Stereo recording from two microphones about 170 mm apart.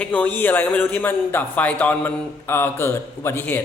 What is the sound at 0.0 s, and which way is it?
Speech, 10° left (ahead or behind).